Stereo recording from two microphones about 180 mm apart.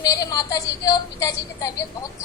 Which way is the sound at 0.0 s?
20° left (ahead or behind).